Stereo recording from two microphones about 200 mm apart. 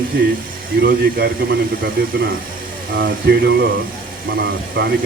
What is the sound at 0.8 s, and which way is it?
A man's voice, 55° right (ahead or behind).